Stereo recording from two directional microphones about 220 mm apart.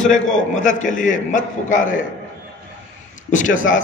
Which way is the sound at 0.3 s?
35° left (ahead or behind).